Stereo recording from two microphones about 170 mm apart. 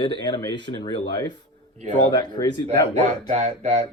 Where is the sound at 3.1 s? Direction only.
45° right (ahead or behind).